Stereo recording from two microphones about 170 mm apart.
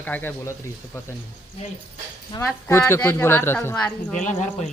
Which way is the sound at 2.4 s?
15° left (ahead or behind).